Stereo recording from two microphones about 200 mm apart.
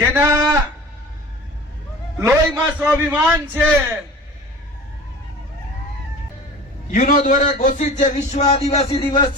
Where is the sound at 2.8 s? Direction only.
10° right (ahead or behind).